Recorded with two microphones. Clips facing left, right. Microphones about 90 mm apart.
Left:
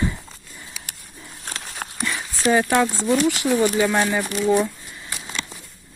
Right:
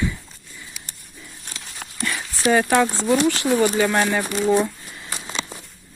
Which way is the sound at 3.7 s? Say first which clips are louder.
Even; centre (ahead or behind).